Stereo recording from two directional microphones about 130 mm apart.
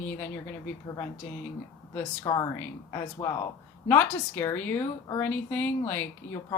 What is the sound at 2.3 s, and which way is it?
Speech, 30° left (ahead or behind).